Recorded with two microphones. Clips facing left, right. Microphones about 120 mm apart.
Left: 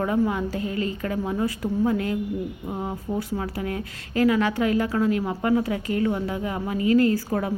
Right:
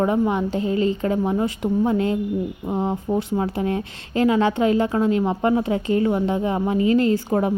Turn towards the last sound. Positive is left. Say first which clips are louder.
# right 4 dB
turn(degrees=-25)  # may be behind; listen again after turning